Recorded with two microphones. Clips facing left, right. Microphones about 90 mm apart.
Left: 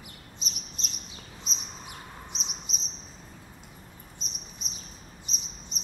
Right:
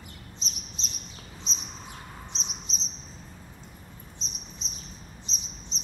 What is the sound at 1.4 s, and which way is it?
Chirp, 5° left (ahead or behind).